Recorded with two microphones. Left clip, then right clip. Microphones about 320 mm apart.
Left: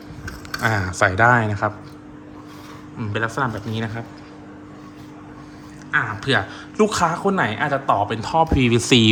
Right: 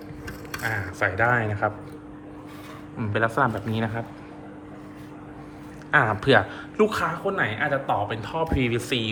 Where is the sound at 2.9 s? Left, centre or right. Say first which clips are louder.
Even; centre.